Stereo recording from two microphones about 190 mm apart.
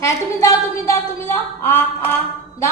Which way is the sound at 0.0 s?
15° left (ahead or behind).